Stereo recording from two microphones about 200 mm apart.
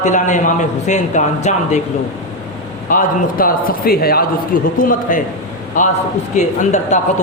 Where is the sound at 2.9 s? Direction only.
45° left (ahead or behind).